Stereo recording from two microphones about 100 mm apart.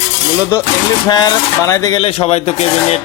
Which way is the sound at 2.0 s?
80° left.